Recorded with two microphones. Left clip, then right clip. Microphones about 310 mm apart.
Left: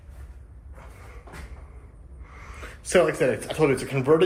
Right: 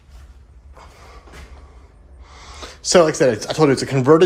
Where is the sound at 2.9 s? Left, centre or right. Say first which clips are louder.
Right 7 dB; right.